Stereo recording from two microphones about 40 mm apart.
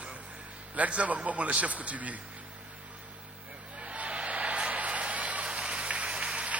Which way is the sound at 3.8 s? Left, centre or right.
Right.